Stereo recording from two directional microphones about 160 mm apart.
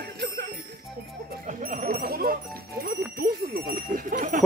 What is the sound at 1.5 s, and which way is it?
Speech, 55° right (ahead or behind).